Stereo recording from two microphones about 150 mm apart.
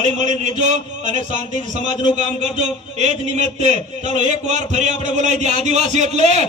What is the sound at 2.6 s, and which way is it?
A man's voice, 50° right (ahead or behind).